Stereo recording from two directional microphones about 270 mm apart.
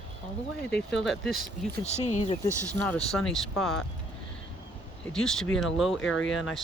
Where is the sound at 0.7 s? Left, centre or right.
Centre.